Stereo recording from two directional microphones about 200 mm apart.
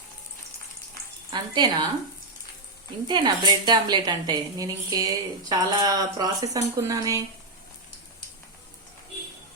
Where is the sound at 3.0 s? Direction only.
25° right (ahead or behind).